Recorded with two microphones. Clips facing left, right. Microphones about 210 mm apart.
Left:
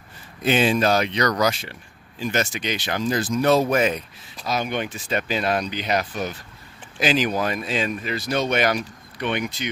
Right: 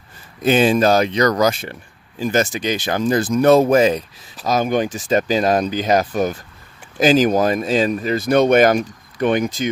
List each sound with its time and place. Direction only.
0.4 s speech: 40° right (ahead or behind)
3.0 s speech: 55° right (ahead or behind)
3.7 s speech: 35° right (ahead or behind)